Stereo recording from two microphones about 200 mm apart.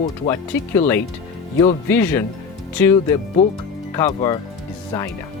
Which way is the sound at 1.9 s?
10° left (ahead or behind).